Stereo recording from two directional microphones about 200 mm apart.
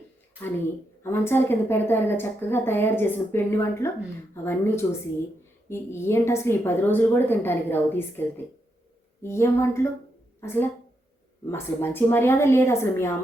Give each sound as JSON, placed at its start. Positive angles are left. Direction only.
{"t": 1.0, "sound": "a woman's voice", "side_deg": 10}
{"t": 9.2, "sound": "a woman's voice", "side_deg": 15}